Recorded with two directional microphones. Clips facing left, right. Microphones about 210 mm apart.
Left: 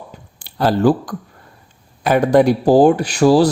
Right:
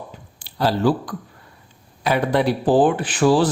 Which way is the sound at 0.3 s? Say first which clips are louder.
Left 4 dB; 50° left (ahead or behind).